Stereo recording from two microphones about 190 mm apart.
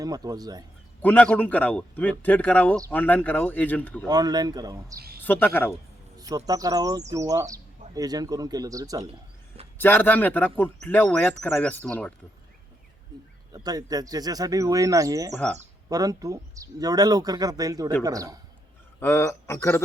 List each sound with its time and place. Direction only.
0.0 s speech: 20° right (ahead or behind)
1.0 s speech: 5° left (ahead or behind)
4.0 s speech: 20° right (ahead or behind)
5.2 s speech: 10° left (ahead or behind)
6.1 s speech: 20° right (ahead or behind)
9.7 s speech: 10° left (ahead or behind)
13.5 s speech: 20° right (ahead or behind)
15.3 s speech: 5° left (ahead or behind)
15.9 s a man's voice: 20° right (ahead or behind)
18.9 s speech: 15° left (ahead or behind)